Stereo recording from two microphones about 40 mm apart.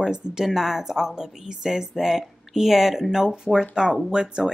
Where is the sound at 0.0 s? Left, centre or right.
Centre.